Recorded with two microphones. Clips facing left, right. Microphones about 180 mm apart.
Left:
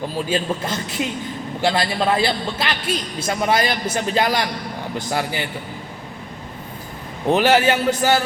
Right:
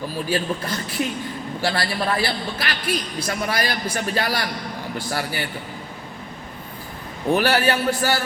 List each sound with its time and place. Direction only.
0.3 s a man's voice: 20° left (ahead or behind)
7.3 s a man's voice: 20° left (ahead or behind)